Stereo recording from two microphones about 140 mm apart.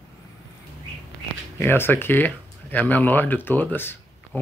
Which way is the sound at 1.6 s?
15° left (ahead or behind).